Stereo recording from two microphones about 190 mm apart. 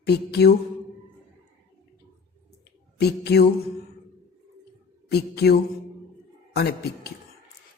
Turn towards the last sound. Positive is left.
turn(degrees=55)  # may be behind; listen again after turning